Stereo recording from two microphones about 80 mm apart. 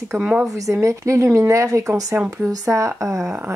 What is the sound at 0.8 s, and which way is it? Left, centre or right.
Speech, right.